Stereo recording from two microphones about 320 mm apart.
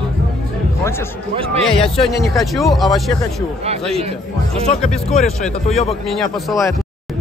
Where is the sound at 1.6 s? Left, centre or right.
Centre.